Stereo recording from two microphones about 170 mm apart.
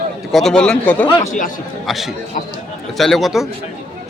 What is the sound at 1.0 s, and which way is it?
Speech, 25° left (ahead or behind).